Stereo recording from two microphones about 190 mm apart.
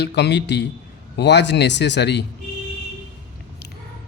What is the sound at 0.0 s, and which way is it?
Speech, 60° left (ahead or behind).